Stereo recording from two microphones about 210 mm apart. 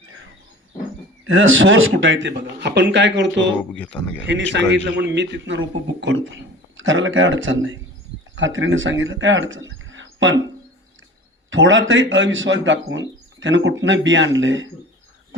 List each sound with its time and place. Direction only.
1.2 s a man's voice: 70° right (ahead or behind)
3.7 s a man's voice: 5° left (ahead or behind)
4.5 s a man's voice: 55° right (ahead or behind)
11.5 s a man's voice: 65° right (ahead or behind)